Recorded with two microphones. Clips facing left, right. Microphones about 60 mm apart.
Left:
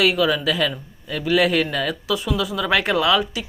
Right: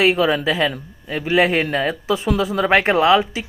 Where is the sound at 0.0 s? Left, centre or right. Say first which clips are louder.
Right 2 dB; right.